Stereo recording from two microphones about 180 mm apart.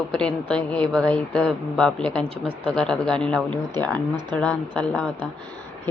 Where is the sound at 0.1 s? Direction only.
5° left (ahead or behind).